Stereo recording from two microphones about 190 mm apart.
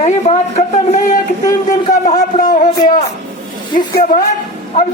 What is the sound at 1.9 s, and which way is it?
A woman's voice, 40° left (ahead or behind).